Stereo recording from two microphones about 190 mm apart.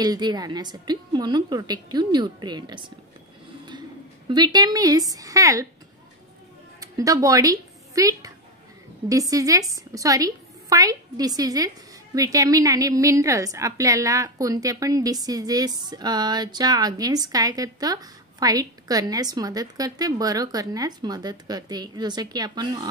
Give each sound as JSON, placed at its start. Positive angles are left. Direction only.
{"t": 0.0, "sound": "a woman's voice", "side_deg": -20}
{"t": 4.3, "sound": "a woman's voice", "side_deg": -20}
{"t": 6.8, "sound": "a woman's voice", "side_deg": -15}